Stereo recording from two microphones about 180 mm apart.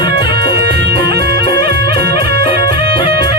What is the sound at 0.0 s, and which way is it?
Music, 60° right (ahead or behind).